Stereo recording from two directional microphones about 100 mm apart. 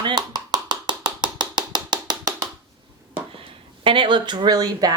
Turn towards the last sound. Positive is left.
turn(degrees=-40)  # may be behind; listen again after turning